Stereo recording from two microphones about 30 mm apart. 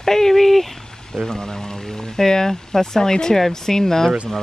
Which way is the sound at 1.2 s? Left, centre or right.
Centre.